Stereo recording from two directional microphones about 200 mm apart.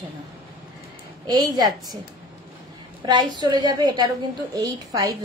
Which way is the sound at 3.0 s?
20° right (ahead or behind).